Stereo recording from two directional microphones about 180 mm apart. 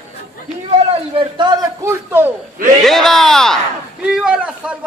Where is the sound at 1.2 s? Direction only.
25° right (ahead or behind).